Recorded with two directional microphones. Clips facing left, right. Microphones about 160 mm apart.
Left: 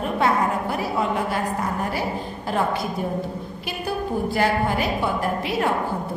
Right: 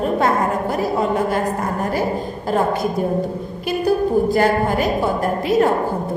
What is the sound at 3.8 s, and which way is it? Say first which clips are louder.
A woman's voice: right 8 dB; 40° right (ahead or behind).